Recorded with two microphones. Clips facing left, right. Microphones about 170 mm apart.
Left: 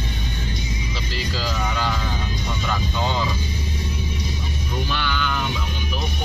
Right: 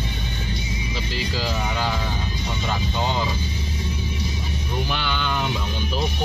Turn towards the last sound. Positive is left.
turn(degrees=-25)  # may be behind; listen again after turning